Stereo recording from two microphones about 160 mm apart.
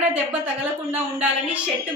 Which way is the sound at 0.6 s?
10° right (ahead or behind).